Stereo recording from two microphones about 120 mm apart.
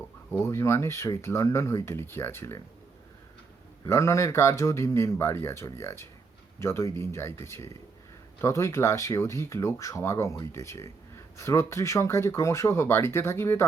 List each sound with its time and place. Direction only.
0.4 s speech: 25° left (ahead or behind)
3.8 s speech: 25° left (ahead or behind)